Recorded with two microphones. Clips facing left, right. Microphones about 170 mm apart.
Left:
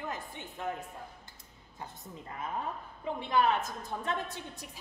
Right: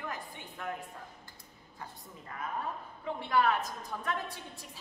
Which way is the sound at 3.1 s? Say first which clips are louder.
Left 1 dB; 20° left (ahead or behind).